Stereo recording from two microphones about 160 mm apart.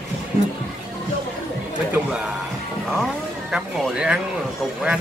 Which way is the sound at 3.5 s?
5° right (ahead or behind).